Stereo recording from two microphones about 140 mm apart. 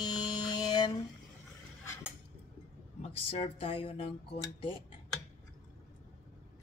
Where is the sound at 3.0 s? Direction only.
45° left (ahead or behind).